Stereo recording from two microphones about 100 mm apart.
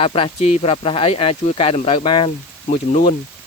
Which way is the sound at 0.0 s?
65° left (ahead or behind).